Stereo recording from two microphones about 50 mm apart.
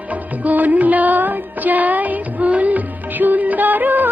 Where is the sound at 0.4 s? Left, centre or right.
Right.